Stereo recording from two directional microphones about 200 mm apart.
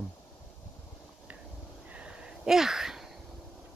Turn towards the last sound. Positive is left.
turn(degrees=0)  # may be behind; listen again after turning